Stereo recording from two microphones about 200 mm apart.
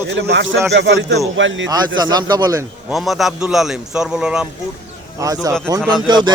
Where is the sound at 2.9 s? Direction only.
Centre (ahead or behind).